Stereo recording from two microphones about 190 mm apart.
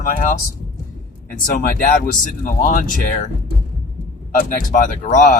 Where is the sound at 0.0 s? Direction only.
45° left (ahead or behind).